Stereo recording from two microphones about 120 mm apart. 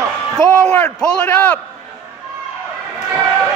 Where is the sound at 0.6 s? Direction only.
10° left (ahead or behind).